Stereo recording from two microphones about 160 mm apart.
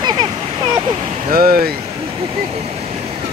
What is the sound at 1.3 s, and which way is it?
Speech, 70° right (ahead or behind).